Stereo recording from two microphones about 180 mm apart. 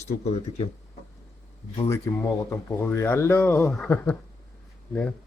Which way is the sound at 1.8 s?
15° left (ahead or behind).